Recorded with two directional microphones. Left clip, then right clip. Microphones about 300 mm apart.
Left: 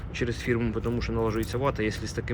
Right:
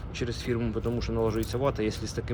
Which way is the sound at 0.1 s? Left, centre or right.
Centre.